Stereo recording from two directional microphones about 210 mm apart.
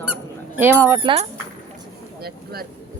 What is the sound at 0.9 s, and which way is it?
Speech, 25° right (ahead or behind).